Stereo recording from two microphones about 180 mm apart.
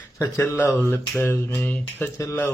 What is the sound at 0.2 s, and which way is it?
Speech, 15° left (ahead or behind).